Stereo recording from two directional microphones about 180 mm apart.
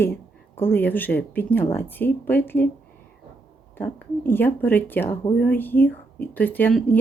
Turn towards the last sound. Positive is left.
turn(degrees=10)  # may be behind; listen again after turning